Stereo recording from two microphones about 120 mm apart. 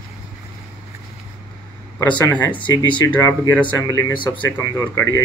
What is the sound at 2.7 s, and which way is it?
Speech, 30° left (ahead or behind).